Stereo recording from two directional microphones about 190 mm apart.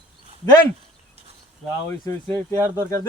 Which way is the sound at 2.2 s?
15° left (ahead or behind).